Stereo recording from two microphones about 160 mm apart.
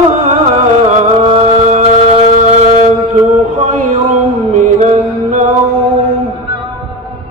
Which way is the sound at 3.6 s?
50° right (ahead or behind).